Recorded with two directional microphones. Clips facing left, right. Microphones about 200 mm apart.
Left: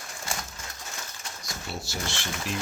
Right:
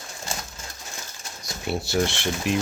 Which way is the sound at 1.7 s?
65° right (ahead or behind).